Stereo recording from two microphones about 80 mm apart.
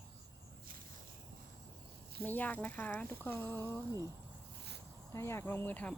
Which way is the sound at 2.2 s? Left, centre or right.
Left.